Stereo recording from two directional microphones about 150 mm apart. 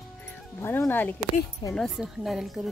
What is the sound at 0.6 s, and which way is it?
Speech, 15° left (ahead or behind).